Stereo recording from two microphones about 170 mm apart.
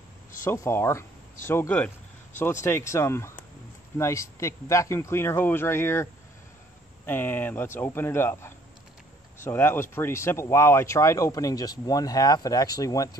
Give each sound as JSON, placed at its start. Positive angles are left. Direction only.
{"t": 0.4, "sound": "speech", "side_deg": 15}
{"t": 7.1, "sound": "speech", "side_deg": 10}